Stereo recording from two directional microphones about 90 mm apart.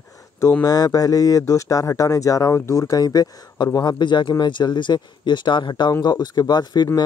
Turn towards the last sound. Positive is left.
turn(degrees=50)  # may be behind; listen again after turning